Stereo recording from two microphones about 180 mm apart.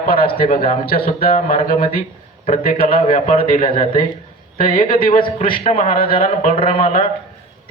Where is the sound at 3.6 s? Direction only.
30° left (ahead or behind).